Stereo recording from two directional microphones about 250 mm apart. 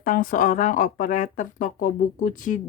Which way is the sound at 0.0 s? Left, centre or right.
Left.